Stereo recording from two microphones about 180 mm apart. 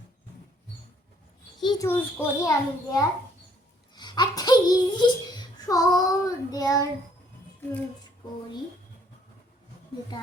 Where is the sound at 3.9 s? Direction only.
25° left (ahead or behind).